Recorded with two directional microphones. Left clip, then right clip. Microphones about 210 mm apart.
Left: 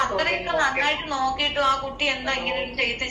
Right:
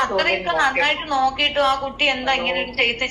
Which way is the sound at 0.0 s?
30° right (ahead or behind).